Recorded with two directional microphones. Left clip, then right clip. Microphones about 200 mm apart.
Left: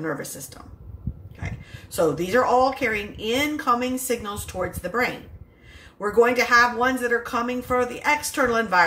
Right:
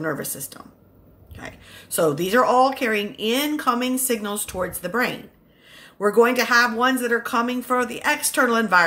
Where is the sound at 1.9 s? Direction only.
40° right (ahead or behind).